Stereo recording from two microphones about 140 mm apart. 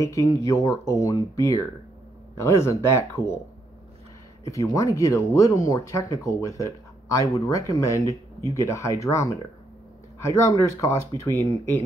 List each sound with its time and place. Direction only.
0.0 s speech: 25° left (ahead or behind)
4.5 s speech: 25° left (ahead or behind)